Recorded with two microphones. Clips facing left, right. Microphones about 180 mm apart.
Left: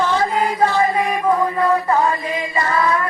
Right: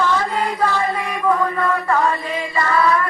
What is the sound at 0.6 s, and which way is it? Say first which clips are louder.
Chant: left 5 dB; 20° left (ahead or behind).